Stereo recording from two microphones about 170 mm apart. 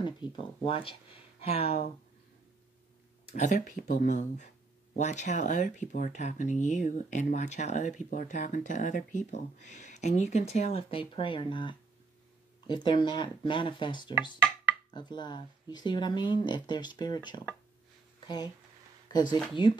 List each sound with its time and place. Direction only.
0.0 s speech: 30° left (ahead or behind)
3.3 s speech: 50° left (ahead or behind); by 18.5 s 25° left (ahead or behind)
19.6 s speech: 30° left (ahead or behind)